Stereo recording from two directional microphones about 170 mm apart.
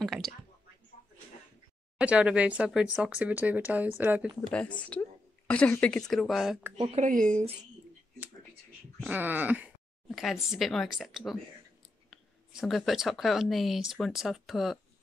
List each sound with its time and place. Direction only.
0.0 s a sound: centre (ahead or behind)
2.0 s speech: 5° right (ahead or behind)
4.5 s speech: 5° left (ahead or behind)
6.9 s speech: 45° right (ahead or behind)
9.0 s speech: 10° right (ahead or behind)